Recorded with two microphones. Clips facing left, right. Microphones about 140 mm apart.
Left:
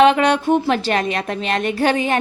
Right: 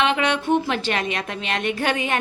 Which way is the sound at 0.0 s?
40° left (ahead or behind).